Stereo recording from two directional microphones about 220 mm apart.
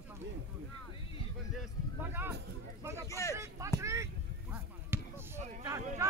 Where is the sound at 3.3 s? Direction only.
15° right (ahead or behind).